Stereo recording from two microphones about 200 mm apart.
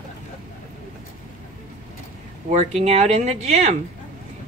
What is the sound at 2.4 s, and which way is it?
A woman's voice, 35° right (ahead or behind).